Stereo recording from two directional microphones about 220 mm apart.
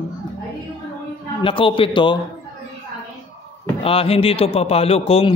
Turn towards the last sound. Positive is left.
turn(degrees=25)  # may be behind; listen again after turning